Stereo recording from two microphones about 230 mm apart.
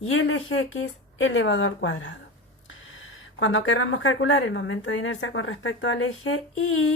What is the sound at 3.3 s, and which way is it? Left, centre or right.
A woman's voice, left.